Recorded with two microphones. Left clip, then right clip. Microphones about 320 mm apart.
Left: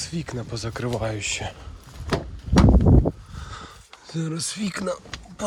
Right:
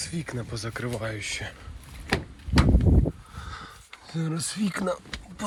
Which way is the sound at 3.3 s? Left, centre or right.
Centre.